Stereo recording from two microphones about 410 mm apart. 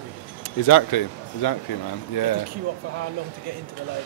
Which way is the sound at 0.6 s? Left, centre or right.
Left.